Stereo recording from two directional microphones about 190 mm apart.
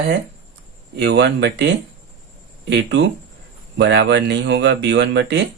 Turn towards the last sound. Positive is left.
turn(degrees=-65)  # may be behind; listen again after turning